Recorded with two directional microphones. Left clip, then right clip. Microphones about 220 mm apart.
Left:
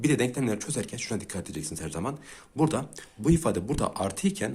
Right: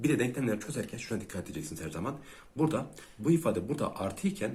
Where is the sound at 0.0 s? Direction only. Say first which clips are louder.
Left 4 dB; 35° left (ahead or behind).